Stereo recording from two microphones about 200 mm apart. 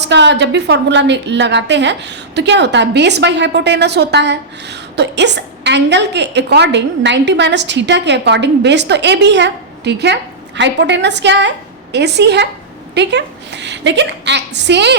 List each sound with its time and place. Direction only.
0.0 s a woman's voice: 60° right (ahead or behind)